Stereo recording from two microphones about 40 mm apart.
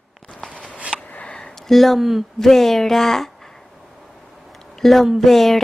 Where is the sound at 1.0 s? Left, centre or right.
Left.